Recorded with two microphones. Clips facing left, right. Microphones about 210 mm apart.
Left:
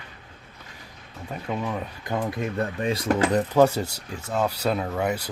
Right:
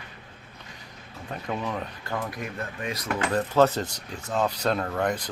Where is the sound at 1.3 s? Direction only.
5° left (ahead or behind).